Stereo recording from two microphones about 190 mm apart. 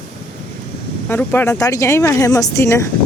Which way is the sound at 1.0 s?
10° left (ahead or behind).